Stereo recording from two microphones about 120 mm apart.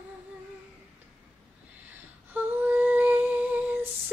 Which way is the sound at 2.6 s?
15° right (ahead or behind).